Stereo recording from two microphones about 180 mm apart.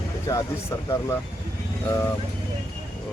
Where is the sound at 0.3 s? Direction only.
20° left (ahead or behind).